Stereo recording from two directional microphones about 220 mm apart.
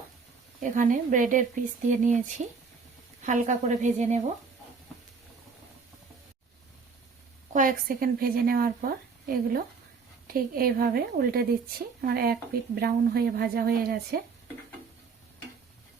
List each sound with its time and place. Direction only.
0.6 s a woman's voice: 35° right (ahead or behind)
3.2 s a woman's voice: 35° right (ahead or behind)
7.5 s a woman's voice: 40° right (ahead or behind)